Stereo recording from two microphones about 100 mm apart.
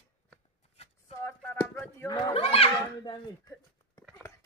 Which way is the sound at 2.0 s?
40° left (ahead or behind).